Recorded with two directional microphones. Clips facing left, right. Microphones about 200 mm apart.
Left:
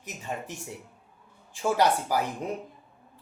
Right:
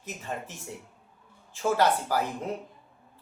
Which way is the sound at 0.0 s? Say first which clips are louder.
Even; 15° left (ahead or behind).